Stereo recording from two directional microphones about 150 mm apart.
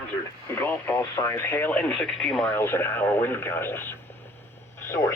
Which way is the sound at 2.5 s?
15° left (ahead or behind).